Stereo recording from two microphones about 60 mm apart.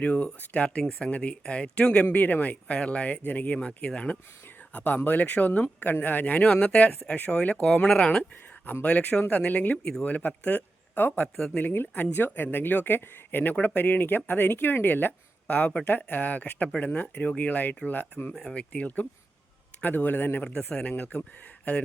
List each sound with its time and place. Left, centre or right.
0.0 s speech: left
4.7 s speech: left
18.3 s speech: centre
18.7 s speech: left